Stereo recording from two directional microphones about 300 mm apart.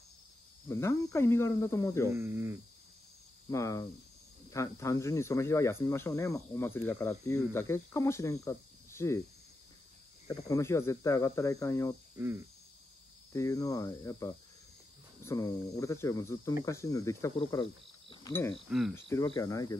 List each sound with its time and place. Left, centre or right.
0.7 s speech: centre
2.0 s speech: centre
3.4 s speech: centre
10.5 s speech: centre
13.3 s speech: centre
18.7 s cricket: centre
19.0 s speech: centre